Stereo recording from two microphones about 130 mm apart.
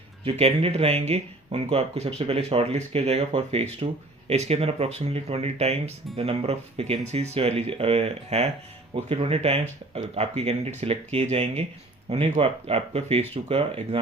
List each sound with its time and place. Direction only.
0.3 s speech: 55° right (ahead or behind)